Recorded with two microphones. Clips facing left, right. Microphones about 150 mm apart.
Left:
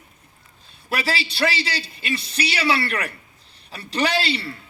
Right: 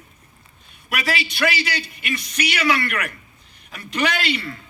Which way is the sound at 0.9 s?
30° left (ahead or behind).